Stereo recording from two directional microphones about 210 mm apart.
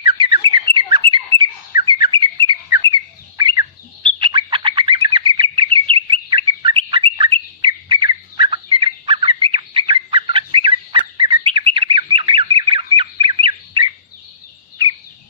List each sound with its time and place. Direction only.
0.0 s bird: 25° right (ahead or behind)